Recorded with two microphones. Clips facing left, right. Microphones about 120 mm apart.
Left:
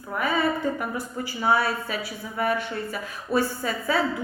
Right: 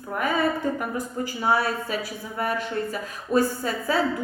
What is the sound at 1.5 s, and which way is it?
A woman's voice, 45° right (ahead or behind).